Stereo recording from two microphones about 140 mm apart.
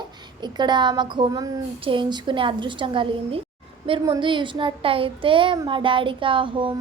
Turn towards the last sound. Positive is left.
turn(degrees=-35)  # may be behind; listen again after turning